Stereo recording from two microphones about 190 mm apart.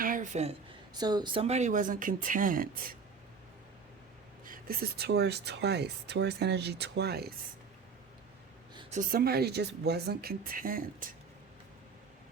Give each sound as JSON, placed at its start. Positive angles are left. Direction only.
{"t": 0.0, "sound": "a sound", "side_deg": -45}
{"t": 0.9, "sound": "speech", "side_deg": -20}
{"t": 4.4, "sound": "speech", "side_deg": -50}
{"t": 8.9, "sound": "speech", "side_deg": -50}